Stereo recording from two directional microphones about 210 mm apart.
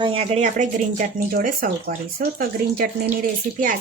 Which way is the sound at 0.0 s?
25° right (ahead or behind).